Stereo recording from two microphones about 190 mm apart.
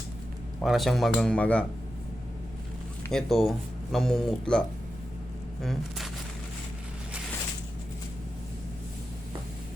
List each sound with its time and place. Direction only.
0.6 s speech: centre (ahead or behind)
3.1 s speech: centre (ahead or behind)